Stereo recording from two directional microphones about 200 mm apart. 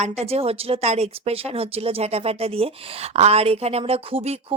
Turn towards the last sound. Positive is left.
turn(degrees=-30)  # may be behind; listen again after turning